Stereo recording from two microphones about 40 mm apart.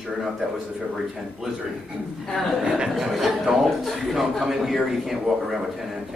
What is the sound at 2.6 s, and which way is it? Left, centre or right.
Speech, centre.